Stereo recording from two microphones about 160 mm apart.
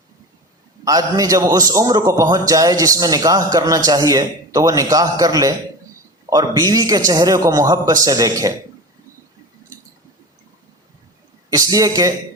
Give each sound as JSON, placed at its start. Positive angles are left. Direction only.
{"t": 0.9, "sound": "a man's voice", "side_deg": -20}
{"t": 11.5, "sound": "a man's voice", "side_deg": -20}